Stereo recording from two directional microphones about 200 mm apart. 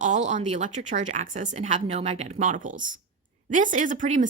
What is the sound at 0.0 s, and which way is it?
A woman's voice, 40° right (ahead or behind).